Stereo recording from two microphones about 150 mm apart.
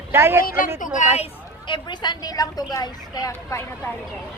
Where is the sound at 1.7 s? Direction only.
30° left (ahead or behind).